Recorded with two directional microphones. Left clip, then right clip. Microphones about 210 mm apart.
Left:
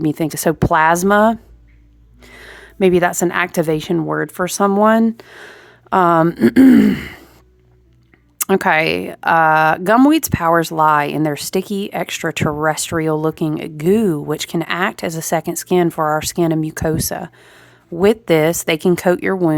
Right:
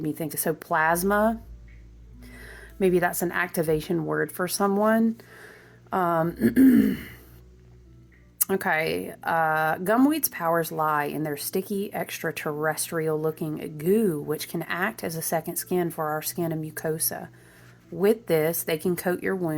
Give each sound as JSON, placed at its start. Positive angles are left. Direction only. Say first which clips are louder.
{"t": 0.0, "sound": "speech", "louder": "left 12 dB", "side_deg": 40}
{"t": 8.4, "sound": "speech", "louder": "left 11 dB", "side_deg": 40}